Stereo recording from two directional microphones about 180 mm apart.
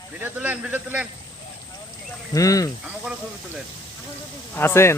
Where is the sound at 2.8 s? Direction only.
5° right (ahead or behind).